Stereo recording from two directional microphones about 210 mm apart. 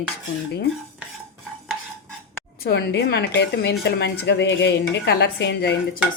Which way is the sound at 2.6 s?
55° left (ahead or behind).